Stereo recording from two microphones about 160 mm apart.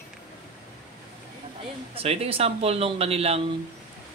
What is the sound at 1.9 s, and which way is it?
Speech, 40° right (ahead or behind).